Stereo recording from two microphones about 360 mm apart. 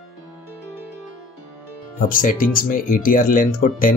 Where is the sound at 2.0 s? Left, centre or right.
Left.